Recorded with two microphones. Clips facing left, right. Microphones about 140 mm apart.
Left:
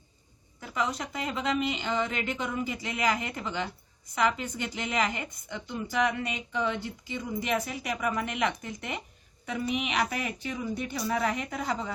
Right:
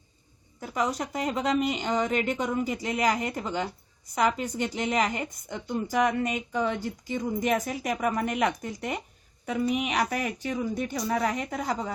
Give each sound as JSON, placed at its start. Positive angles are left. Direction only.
{"t": 0.6, "sound": "a woman's voice", "side_deg": -40}